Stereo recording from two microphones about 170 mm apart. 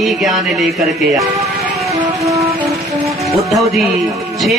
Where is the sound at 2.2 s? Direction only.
20° right (ahead or behind).